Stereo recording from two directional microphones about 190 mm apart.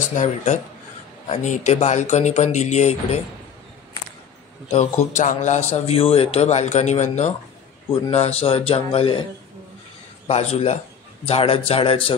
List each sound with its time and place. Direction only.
0.0 s a man's voice: 40° left (ahead or behind)
4.6 s a man's voice: 35° left (ahead or behind)
10.2 s a man's voice: 30° left (ahead or behind)